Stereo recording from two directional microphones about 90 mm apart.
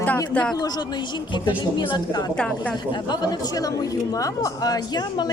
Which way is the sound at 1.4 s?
60° left (ahead or behind).